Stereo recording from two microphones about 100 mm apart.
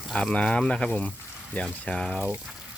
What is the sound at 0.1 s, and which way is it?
Speech, 10° left (ahead or behind).